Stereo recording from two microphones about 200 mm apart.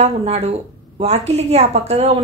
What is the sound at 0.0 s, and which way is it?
A woman's voice, 30° right (ahead or behind).